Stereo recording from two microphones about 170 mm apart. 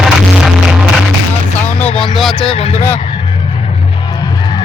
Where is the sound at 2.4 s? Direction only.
35° left (ahead or behind).